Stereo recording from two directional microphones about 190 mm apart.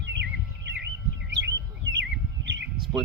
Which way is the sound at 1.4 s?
70° right (ahead or behind).